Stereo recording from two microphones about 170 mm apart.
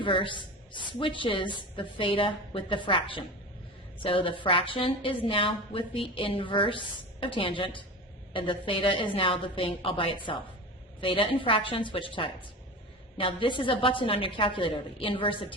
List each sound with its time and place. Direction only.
0.0 s a woman's voice: 30° left (ahead or behind)